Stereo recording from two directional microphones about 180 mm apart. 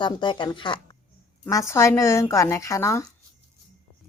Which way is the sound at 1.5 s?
15° left (ahead or behind).